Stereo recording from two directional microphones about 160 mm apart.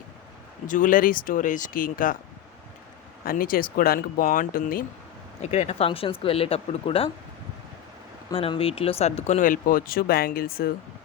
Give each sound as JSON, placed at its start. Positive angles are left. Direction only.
{"t": 0.7, "sound": "speech", "side_deg": 55}
{"t": 3.2, "sound": "speech", "side_deg": 65}
{"t": 5.4, "sound": "speech", "side_deg": 40}
{"t": 8.3, "sound": "speech", "side_deg": 35}